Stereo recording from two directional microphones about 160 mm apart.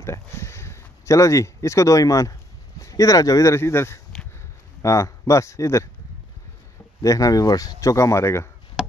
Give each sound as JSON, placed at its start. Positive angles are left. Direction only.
{"t": 0.0, "sound": "speech", "side_deg": 15}
{"t": 7.0, "sound": "speech", "side_deg": 20}